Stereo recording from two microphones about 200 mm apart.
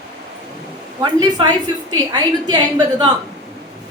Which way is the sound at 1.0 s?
20° right (ahead or behind).